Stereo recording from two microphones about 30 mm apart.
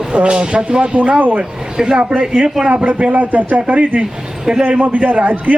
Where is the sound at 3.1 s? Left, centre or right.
Right.